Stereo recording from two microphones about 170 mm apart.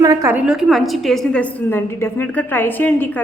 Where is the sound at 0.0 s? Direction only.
20° right (ahead or behind).